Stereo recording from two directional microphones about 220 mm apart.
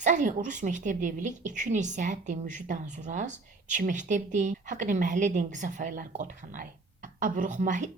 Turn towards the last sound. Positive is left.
turn(degrees=-35)  # may be behind; listen again after turning